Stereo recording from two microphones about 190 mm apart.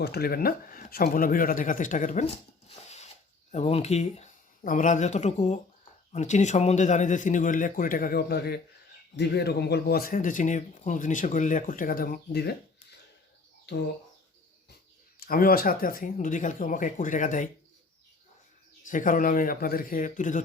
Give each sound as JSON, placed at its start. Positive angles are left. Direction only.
{"t": 0.0, "sound": "speech", "side_deg": 55}
{"t": 15.2, "sound": "speech", "side_deg": 50}
{"t": 18.9, "sound": "speech", "side_deg": 45}